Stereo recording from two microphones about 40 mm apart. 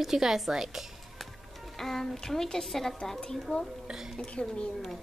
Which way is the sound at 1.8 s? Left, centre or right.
Centre.